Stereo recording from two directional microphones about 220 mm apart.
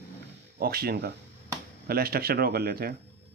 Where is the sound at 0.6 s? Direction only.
45° right (ahead or behind).